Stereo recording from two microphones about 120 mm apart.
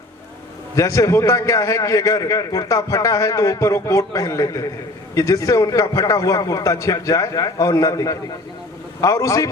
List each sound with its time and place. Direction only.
0.8 s a man's voice: 25° left (ahead or behind)